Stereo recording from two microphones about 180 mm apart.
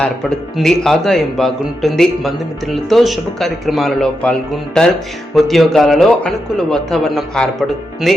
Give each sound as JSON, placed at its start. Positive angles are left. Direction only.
{"t": 0.5, "sound": "speech", "side_deg": 0}